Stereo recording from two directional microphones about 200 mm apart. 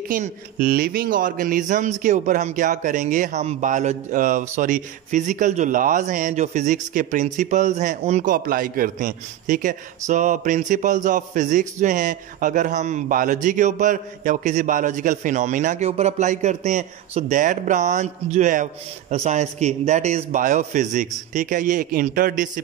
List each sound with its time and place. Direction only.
0.1 s speech: 45° right (ahead or behind)